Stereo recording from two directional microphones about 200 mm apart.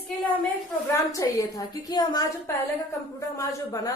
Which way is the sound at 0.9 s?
15° left (ahead or behind).